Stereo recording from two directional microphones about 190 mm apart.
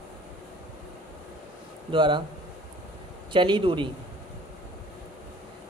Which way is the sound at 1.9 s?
25° right (ahead or behind).